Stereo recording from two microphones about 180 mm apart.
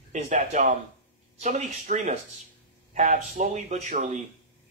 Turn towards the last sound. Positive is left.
turn(degrees=-40)  # may be behind; listen again after turning